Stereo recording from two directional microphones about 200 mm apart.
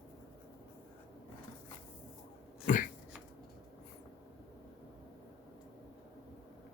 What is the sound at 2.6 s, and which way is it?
Dog, 40° left (ahead or behind).